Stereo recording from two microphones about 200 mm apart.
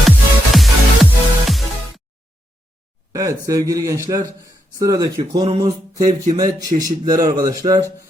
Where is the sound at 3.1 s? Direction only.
15° right (ahead or behind).